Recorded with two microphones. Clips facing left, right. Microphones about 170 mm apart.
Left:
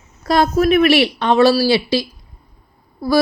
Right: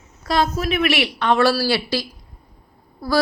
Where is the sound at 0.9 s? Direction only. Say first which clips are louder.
Left 5 dB; 30° left (ahead or behind); by 2.0 s 15° left (ahead or behind).